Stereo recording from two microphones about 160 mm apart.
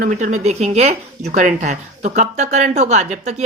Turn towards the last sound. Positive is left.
turn(degrees=-45)  # may be behind; listen again after turning